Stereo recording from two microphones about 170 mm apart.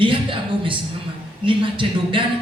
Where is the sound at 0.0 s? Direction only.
30° right (ahead or behind).